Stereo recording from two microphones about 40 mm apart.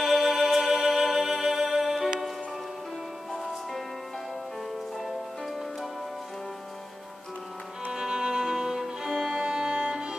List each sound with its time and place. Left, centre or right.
0.0 s music: centre
7.9 s music: centre
9.4 s music: centre